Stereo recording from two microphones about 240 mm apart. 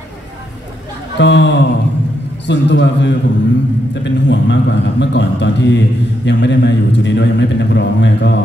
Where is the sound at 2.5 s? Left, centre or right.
Left.